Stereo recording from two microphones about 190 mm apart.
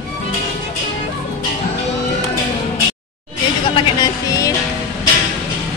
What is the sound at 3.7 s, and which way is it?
Music, 20° left (ahead or behind).